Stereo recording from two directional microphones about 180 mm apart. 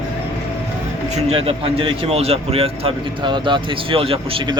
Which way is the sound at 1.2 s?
35° right (ahead or behind).